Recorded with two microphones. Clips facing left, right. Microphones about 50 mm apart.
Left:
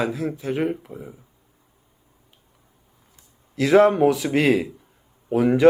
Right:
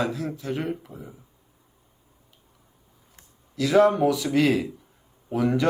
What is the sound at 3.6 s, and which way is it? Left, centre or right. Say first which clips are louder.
Speech: left 3 dB; left.